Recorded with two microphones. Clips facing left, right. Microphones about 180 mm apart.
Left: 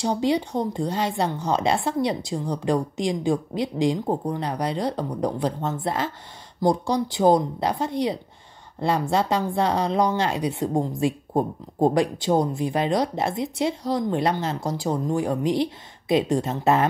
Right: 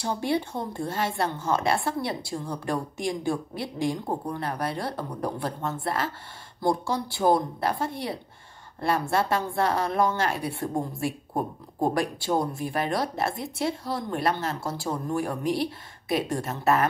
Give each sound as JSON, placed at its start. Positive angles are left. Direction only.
{"t": 0.0, "sound": "speech", "side_deg": 20}